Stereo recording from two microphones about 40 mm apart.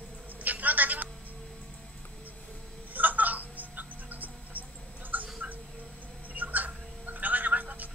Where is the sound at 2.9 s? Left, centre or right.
Right.